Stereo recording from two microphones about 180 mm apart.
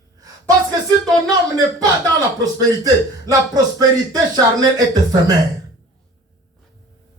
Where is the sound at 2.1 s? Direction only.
20° right (ahead or behind).